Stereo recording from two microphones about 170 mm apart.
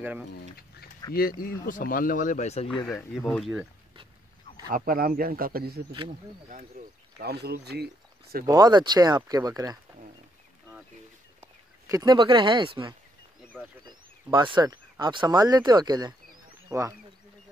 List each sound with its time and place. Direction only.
1.1 s speech: 60° left (ahead or behind); by 2.7 s 40° left (ahead or behind)
2.8 s speech: 20° left (ahead or behind)
3.2 s speech: centre (ahead or behind)
4.7 s speech: 55° right (ahead or behind)
7.2 s speech: 70° right (ahead or behind)
8.5 s speech: 25° right (ahead or behind)
11.4 s speech: 20° right (ahead or behind)
13.4 s a sound: 10° right (ahead or behind)
13.8 s speech: 25° right (ahead or behind)